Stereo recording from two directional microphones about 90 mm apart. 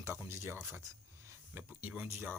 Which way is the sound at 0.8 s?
30° right (ahead or behind).